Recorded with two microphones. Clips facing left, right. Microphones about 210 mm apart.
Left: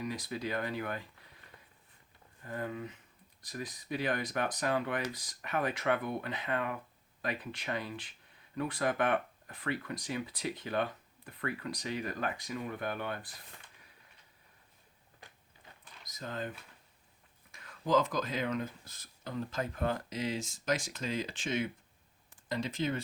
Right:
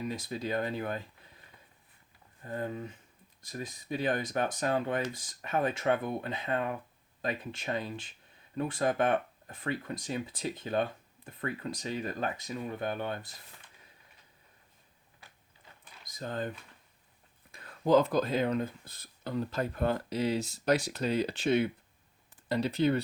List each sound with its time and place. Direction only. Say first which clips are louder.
0.0 s speech: right 2 dB; 25° right (ahead or behind)
2.4 s speech: right 2 dB; 30° right (ahead or behind)
16.0 s speech: right 4 dB; 30° right (ahead or behind)
17.5 s a sound: right 5 dB; 35° right (ahead or behind)
18.3 s speech: right 5 dB; 35° right (ahead or behind)
20.4 s speech: right 6 dB; 65° right (ahead or behind)
22.4 s speech: right 5 dB; 35° right (ahead or behind)